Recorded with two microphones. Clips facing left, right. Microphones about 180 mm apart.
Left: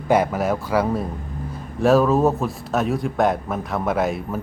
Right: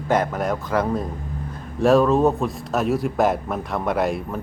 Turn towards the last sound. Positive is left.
turn(degrees=0)  # may be behind; listen again after turning